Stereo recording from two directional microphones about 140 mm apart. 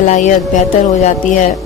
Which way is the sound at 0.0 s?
60° left (ahead or behind).